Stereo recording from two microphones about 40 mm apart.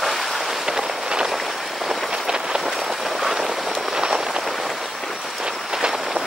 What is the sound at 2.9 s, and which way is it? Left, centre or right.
Vehicle, centre.